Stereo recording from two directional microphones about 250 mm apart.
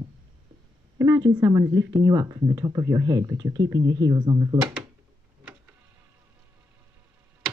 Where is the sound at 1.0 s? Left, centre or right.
Centre.